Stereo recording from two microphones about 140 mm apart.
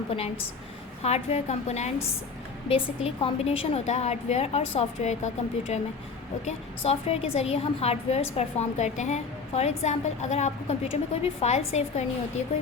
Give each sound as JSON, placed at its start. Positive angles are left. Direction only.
{"t": 0.1, "sound": "a woman's voice", "side_deg": 45}